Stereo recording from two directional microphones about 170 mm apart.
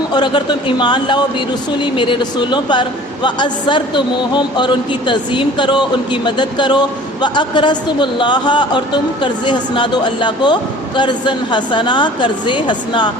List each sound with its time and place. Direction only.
0.1 s speech: 25° left (ahead or behind)